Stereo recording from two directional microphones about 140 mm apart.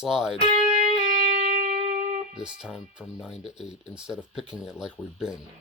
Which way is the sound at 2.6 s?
5° right (ahead or behind).